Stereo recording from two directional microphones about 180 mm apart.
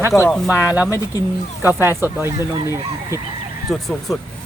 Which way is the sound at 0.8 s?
20° left (ahead or behind).